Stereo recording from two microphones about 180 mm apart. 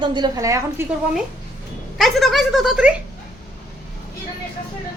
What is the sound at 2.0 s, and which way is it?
Speech, centre (ahead or behind).